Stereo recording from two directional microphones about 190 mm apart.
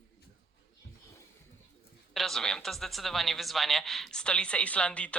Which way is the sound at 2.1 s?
Centre (ahead or behind).